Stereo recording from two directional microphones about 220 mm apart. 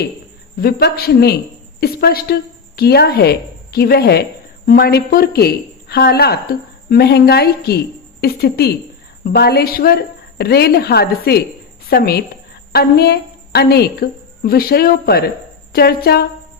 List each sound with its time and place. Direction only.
0.6 s a woman's voice: 45° left (ahead or behind)